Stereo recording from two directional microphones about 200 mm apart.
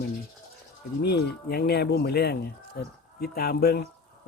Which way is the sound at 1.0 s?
55° left (ahead or behind).